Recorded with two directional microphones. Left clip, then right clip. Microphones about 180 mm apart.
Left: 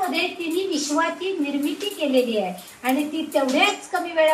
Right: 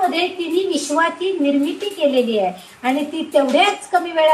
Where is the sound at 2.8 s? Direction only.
45° right (ahead or behind).